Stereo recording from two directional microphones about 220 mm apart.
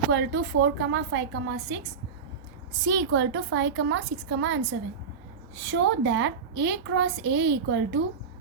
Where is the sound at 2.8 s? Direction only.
55° right (ahead or behind).